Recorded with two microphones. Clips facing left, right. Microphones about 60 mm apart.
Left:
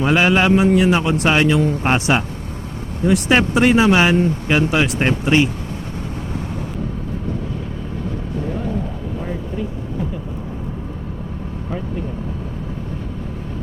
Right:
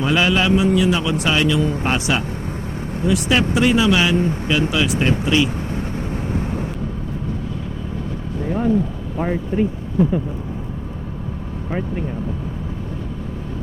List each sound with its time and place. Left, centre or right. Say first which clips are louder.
0.0 s speech: left 2 dB; left
9.2 s speech: right 8 dB; right